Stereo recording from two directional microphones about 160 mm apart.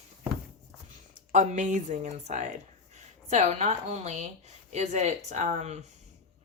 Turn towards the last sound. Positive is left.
turn(degrees=-45)  # may be behind; listen again after turning